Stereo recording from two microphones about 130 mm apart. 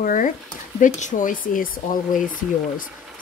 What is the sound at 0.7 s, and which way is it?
Speech, 70° left (ahead or behind).